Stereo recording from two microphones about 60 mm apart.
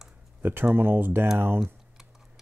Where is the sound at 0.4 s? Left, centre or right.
Right.